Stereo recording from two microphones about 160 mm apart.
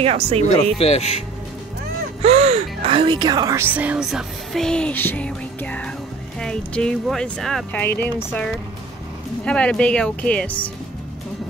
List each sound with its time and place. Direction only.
0.0 s speech: 40° right (ahead or behind)
0.7 s speech: 40° left (ahead or behind)
2.2 s speech: 40° right (ahead or behind); by 3.6 s 25° right (ahead or behind)
3.7 s music: 10° right (ahead or behind); by 8.5 s 15° left (ahead or behind)
9.4 s speech: 5° left (ahead or behind)